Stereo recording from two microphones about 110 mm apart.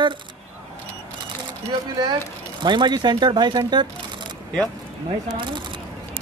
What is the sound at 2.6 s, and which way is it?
Speech, 45° right (ahead or behind).